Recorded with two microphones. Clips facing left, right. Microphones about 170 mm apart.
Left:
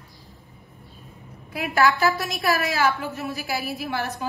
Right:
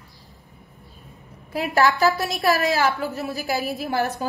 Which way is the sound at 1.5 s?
40° right (ahead or behind).